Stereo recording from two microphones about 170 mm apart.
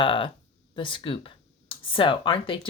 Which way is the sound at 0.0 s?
30° left (ahead or behind).